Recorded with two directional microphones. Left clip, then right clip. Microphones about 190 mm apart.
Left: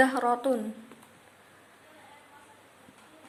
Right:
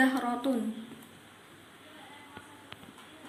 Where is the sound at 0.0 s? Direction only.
45° left (ahead or behind).